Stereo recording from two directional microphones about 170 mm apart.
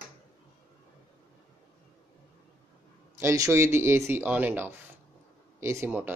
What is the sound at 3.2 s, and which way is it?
Speech, 15° right (ahead or behind).